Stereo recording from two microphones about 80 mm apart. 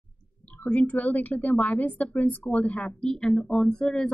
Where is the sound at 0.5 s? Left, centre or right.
Centre.